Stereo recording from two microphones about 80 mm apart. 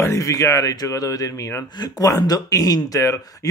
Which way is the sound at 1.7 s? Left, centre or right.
Left.